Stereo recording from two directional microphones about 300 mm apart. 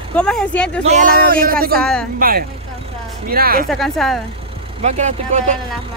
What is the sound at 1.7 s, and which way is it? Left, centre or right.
Speech, centre.